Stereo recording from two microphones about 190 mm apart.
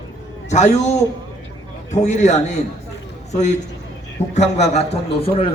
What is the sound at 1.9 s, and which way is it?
A man's voice, 35° left (ahead or behind).